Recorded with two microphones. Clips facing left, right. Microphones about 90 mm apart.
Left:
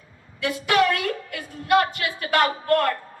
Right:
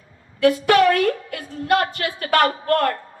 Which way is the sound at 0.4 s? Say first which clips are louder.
Right 6 dB; 45° right (ahead or behind).